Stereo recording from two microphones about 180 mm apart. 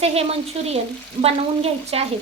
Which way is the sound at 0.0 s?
35° right (ahead or behind).